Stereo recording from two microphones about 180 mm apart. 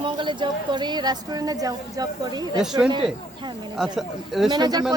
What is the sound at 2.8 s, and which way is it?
Speech, 25° right (ahead or behind).